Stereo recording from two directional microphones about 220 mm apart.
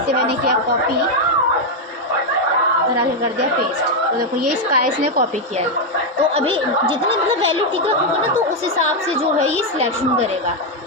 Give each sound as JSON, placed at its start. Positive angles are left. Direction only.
{"t": 4.4, "sound": "a woman's voice", "side_deg": -90}
{"t": 6.4, "sound": "a woman's voice", "side_deg": -25}
{"t": 9.0, "sound": "a woman's voice", "side_deg": -25}